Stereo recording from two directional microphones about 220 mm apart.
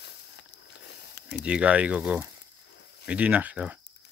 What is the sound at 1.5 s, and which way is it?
Speech, 5° right (ahead or behind).